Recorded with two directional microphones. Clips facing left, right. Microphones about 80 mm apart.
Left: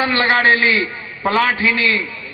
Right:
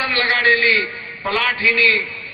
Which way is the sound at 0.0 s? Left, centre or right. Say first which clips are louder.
Left 3 dB; left.